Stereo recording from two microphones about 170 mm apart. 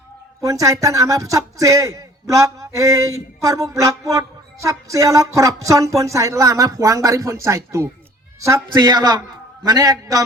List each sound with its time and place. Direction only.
0.4 s speech: 20° right (ahead or behind)